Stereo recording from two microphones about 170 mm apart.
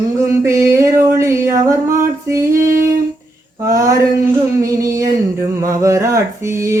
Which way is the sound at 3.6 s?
20° right (ahead or behind).